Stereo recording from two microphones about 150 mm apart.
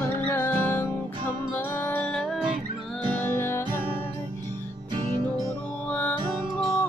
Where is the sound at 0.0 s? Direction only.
15° left (ahead or behind).